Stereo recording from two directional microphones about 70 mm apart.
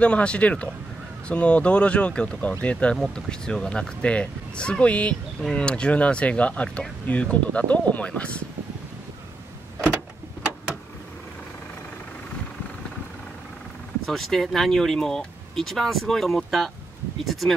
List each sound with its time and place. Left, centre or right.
0.0 s speech: centre
14.0 s speech: centre